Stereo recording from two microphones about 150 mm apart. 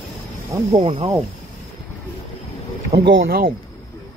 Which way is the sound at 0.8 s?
45° right (ahead or behind).